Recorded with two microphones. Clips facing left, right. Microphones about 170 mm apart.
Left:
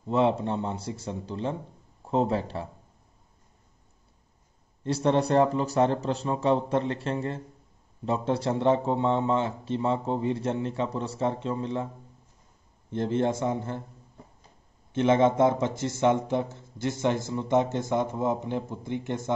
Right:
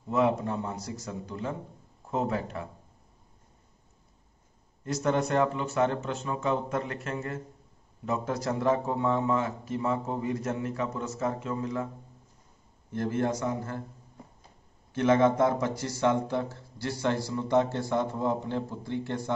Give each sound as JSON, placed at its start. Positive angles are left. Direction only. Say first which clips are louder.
{"t": 0.1, "sound": "speech", "louder": "left 2 dB", "side_deg": 30}
{"t": 4.8, "sound": "speech", "louder": "left 3 dB", "side_deg": 30}
{"t": 12.9, "sound": "speech", "louder": "left 3 dB", "side_deg": 25}
{"t": 14.9, "sound": "speech", "louder": "left 1 dB", "side_deg": 20}